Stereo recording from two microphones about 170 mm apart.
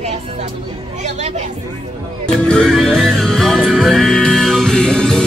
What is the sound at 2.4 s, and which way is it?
Music, 5° left (ahead or behind).